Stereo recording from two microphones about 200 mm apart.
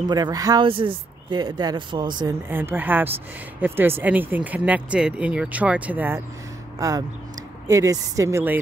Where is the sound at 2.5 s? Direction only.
10° right (ahead or behind).